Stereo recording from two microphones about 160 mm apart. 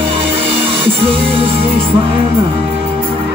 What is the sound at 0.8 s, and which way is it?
Music, centre (ahead or behind).